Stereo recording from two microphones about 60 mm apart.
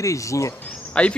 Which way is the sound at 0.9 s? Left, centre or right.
Centre.